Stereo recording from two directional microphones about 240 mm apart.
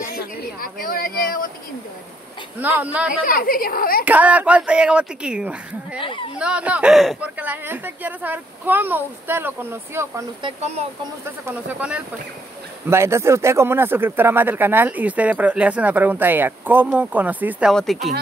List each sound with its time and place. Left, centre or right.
0.6 s speech: left
2.6 s speech: centre
3.1 s speech: left
4.0 s speech: centre
5.9 s speech: left
6.3 s speech: centre